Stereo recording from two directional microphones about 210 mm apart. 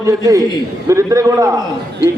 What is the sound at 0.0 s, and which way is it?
A man's voice, 15° right (ahead or behind).